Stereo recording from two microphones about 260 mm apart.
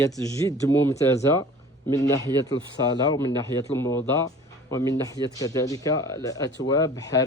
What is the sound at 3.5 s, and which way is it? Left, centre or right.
A man's voice, centre.